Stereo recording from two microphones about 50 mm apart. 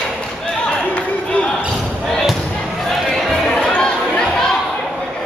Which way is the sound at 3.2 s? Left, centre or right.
Centre.